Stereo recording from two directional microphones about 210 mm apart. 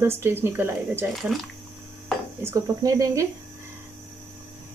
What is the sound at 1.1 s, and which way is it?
Speech, centre (ahead or behind).